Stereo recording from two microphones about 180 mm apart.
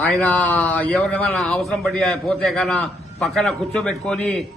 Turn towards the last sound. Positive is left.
turn(degrees=5)  # may be behind; listen again after turning